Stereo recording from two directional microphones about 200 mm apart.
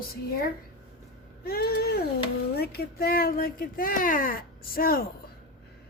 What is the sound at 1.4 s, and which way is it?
Speech, 50° left (ahead or behind).